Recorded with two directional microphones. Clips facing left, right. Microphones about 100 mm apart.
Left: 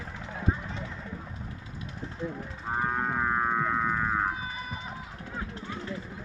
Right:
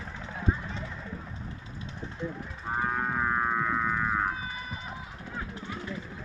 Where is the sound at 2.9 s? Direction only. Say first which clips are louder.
Left 1 dB; 35° left (ahead or behind).